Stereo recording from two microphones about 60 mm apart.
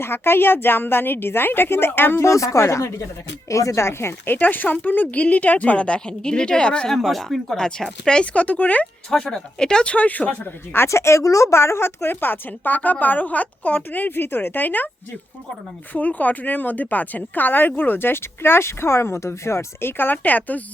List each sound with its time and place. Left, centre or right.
0.0 s speech: left
2.2 s speech: left
3.8 s speech: left
4.4 s a woman's voice: left
6.9 s speech: centre; by 8.9 s left
9.0 s a woman's voice: centre; by 10.8 s left
10.8 s speech: left
15.9 s speech: left